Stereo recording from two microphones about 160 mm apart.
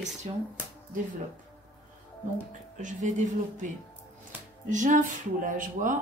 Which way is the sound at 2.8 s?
50° right (ahead or behind).